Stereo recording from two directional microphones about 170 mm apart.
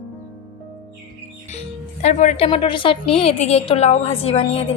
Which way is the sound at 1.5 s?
40° left (ahead or behind).